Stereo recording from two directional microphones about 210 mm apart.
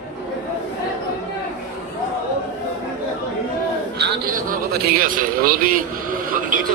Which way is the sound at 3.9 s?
45° right (ahead or behind).